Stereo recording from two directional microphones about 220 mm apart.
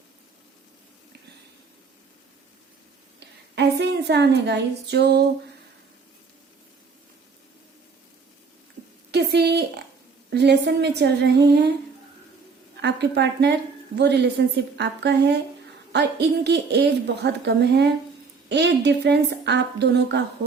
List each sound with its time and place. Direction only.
3.5 s a woman's voice: 50° right (ahead or behind)
9.1 s a woman's voice: 50° right (ahead or behind)
12.8 s a woman's voice: 50° right (ahead or behind)